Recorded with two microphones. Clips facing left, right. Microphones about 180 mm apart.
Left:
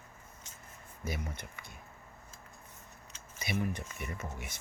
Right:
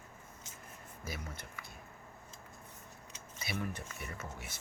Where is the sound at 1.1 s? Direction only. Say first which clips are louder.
Left 5 dB; 20° left (ahead or behind).